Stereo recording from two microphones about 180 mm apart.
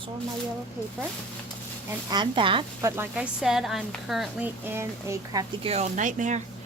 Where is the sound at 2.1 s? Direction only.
25° right (ahead or behind).